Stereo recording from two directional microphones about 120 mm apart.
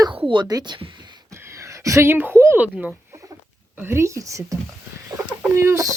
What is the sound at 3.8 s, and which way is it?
Speech, 20° right (ahead or behind).